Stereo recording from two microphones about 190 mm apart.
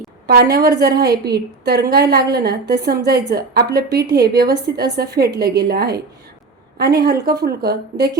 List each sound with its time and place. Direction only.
0.3 s a woman's voice: 55° right (ahead or behind)